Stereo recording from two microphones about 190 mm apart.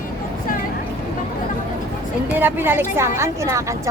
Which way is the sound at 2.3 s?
10° right (ahead or behind).